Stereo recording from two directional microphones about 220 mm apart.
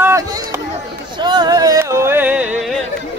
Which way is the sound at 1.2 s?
20° right (ahead or behind).